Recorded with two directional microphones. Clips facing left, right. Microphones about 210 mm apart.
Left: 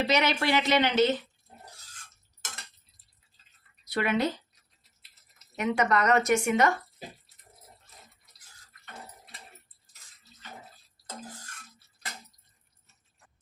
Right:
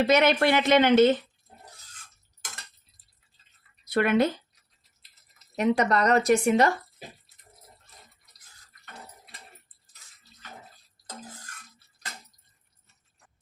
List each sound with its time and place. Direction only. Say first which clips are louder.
0.1 s speech: right 5 dB; 55° right (ahead or behind)
3.8 s a woman's voice: right 5 dB; 50° right (ahead or behind)
5.5 s speech: right 3 dB; 35° right (ahead or behind)